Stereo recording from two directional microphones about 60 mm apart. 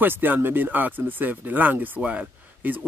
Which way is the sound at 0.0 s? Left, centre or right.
Right.